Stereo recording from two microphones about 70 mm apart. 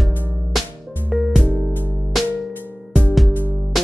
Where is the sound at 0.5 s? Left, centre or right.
Centre.